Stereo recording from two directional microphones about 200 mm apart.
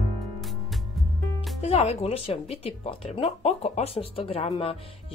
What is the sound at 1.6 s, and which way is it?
Speech, 30° left (ahead or behind).